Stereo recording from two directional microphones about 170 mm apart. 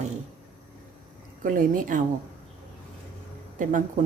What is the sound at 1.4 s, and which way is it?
Speech, 50° right (ahead or behind).